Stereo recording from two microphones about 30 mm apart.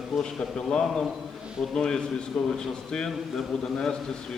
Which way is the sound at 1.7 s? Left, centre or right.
Left.